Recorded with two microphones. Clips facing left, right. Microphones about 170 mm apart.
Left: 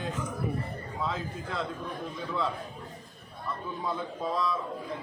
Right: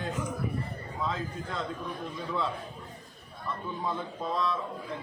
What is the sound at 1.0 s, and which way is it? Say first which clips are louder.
Speech: right 1 dB; centre (ahead or behind).